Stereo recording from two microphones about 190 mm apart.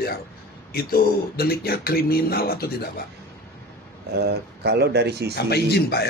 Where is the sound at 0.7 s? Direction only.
50° left (ahead or behind).